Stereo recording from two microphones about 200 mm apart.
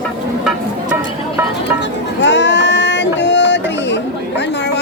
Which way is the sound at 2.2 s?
60° left (ahead or behind).